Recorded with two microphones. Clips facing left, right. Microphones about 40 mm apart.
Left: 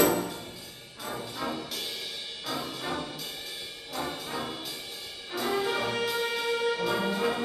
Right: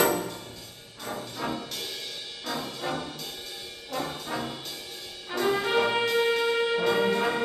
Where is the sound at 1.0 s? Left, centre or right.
Centre.